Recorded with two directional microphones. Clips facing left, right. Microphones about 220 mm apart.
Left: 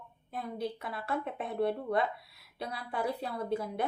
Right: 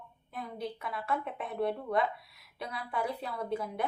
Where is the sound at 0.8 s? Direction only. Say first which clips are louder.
Even; 30° left (ahead or behind).